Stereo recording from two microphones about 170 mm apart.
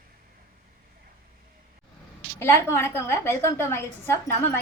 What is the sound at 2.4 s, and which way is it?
A woman's voice, 15° left (ahead or behind).